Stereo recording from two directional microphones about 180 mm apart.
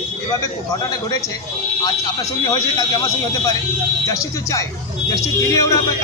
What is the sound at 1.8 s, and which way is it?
A man's voice, 20° left (ahead or behind).